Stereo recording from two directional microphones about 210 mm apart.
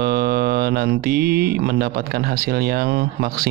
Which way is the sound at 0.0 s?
45° right (ahead or behind).